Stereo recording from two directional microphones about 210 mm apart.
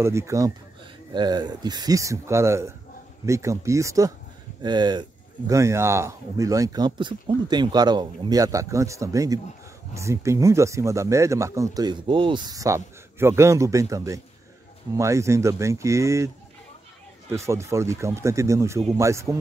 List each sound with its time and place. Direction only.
0.0 s speech: 10° right (ahead or behind)
17.3 s speech: 15° right (ahead or behind)